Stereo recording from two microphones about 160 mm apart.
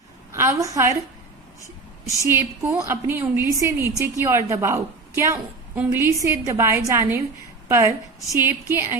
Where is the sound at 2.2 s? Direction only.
15° right (ahead or behind).